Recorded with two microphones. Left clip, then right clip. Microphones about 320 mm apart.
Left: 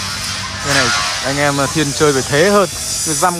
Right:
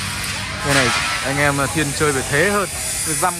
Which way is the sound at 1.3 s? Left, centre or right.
Centre.